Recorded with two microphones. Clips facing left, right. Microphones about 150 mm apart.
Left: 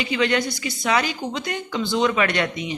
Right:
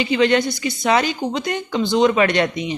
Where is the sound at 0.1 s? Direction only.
25° right (ahead or behind).